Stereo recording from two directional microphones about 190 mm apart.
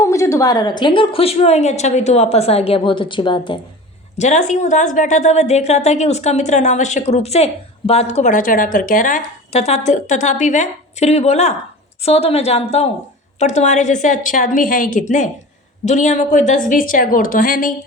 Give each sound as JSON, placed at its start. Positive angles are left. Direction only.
{"t": 0.0, "sound": "a woman's voice", "side_deg": 15}
{"t": 4.2, "sound": "a woman's voice", "side_deg": 40}